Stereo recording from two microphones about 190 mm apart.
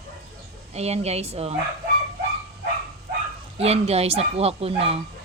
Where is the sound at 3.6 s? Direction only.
30° right (ahead or behind).